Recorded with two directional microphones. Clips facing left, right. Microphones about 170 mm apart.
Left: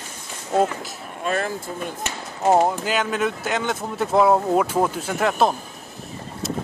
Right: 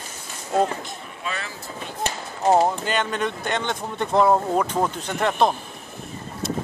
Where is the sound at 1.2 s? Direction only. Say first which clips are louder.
Left 8 dB; 50° left (ahead or behind).